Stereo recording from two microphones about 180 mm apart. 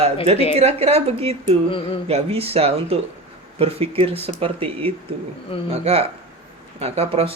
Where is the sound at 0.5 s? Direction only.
35° right (ahead or behind).